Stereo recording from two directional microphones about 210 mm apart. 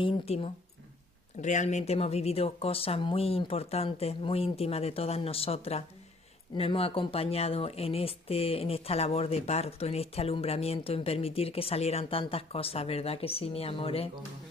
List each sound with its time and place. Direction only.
0.0 s speech: 30° left (ahead or behind)